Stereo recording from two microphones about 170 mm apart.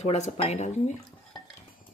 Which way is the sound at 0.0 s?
40° left (ahead or behind).